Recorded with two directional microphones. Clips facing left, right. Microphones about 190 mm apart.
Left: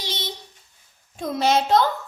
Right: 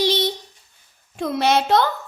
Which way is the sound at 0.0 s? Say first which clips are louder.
Right 13 dB; 70° right (ahead or behind).